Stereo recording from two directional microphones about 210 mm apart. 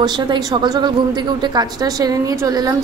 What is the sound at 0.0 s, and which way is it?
A woman's voice, 20° right (ahead or behind).